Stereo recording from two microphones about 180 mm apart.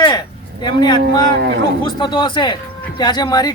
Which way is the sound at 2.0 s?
25° left (ahead or behind).